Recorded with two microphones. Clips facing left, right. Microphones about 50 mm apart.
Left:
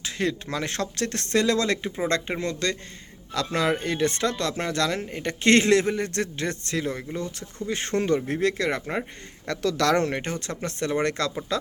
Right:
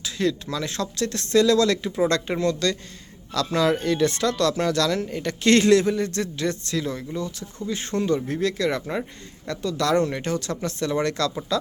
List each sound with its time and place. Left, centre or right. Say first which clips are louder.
0.0 s a man's voice: right 3 dB; left
9.5 s speech: even; left